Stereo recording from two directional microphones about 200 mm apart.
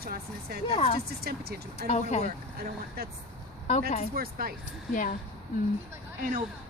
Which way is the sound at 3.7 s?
35° left (ahead or behind).